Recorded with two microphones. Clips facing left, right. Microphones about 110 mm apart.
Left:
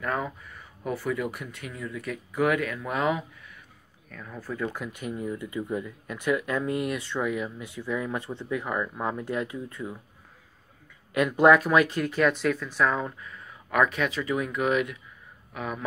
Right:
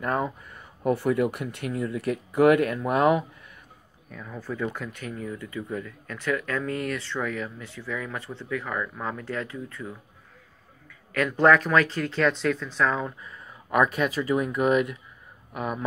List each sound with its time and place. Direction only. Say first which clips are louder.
0.0 s speech: right 3 dB; 35° right (ahead or behind)
0.8 s speech: right 6 dB; 55° right (ahead or behind)
4.1 s speech: right 2 dB; 5° right (ahead or behind); by 9.9 s 15° left (ahead or behind)
11.1 s speech: left 1 dB; 15° left (ahead or behind)
13.7 s speech: right 2 dB; 35° right (ahead or behind)